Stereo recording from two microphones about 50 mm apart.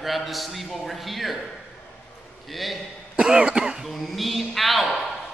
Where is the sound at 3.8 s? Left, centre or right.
Centre.